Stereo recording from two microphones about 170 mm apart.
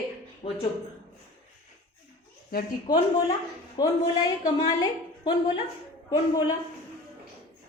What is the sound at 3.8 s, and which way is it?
A man's voice, 25° left (ahead or behind).